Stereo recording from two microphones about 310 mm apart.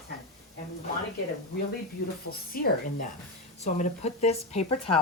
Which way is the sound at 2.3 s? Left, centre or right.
Left.